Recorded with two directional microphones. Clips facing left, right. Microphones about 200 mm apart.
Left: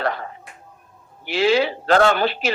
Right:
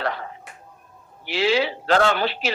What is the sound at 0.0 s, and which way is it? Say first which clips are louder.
A man's voice: left 3 dB; 50° left (ahead or behind).